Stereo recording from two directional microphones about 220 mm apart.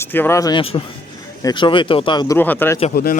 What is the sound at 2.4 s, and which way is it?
Speech, 10° left (ahead or behind).